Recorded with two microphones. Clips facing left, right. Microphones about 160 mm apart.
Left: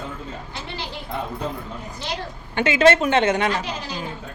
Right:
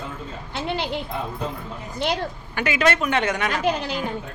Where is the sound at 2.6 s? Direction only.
25° left (ahead or behind).